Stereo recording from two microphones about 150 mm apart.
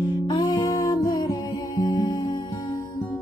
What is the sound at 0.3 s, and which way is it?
Music, 30° left (ahead or behind).